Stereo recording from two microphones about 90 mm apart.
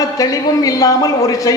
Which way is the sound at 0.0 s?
40° left (ahead or behind).